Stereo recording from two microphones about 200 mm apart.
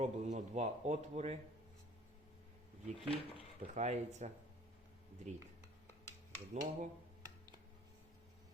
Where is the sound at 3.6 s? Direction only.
35° right (ahead or behind).